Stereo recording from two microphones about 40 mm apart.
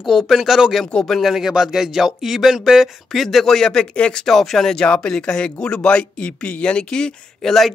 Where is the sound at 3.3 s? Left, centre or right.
Centre.